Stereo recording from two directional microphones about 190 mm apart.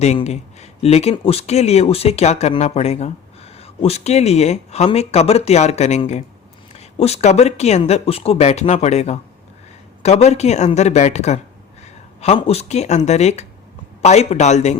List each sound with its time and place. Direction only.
0.0 s speech: 35° left (ahead or behind)